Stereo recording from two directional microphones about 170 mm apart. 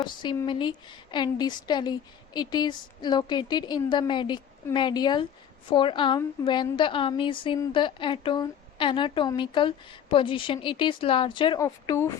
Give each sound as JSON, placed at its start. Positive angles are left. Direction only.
{"t": 0.0, "sound": "a woman's voice", "side_deg": 25}
{"t": 11.6, "sound": "a woman's voice", "side_deg": 20}